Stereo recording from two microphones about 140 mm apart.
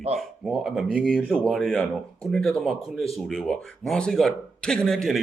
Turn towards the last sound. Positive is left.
turn(degrees=0)  # may be behind; listen again after turning